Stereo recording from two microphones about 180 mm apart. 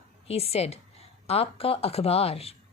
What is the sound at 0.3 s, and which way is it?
A woman's voice, 35° left (ahead or behind).